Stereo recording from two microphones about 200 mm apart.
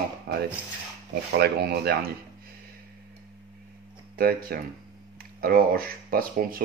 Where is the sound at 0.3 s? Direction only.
60° right (ahead or behind).